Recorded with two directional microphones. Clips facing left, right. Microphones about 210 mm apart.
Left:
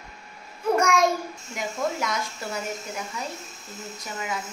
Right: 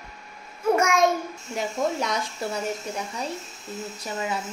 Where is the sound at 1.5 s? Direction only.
35° right (ahead or behind).